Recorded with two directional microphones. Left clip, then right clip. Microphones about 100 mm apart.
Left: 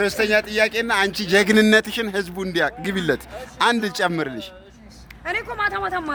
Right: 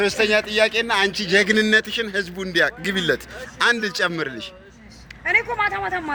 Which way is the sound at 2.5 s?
75° left (ahead or behind).